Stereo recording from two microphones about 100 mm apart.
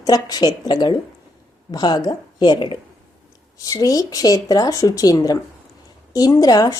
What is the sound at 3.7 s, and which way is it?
A woman's voice, 35° left (ahead or behind).